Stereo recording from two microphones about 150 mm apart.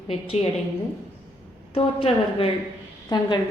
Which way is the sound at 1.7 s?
40° left (ahead or behind).